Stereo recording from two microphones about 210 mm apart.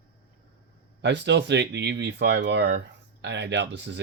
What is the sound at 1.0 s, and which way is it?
Speech, 55° right (ahead or behind).